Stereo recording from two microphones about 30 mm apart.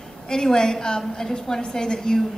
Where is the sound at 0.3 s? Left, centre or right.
Left.